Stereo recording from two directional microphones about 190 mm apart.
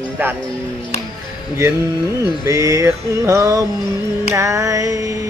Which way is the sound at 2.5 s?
15° right (ahead or behind).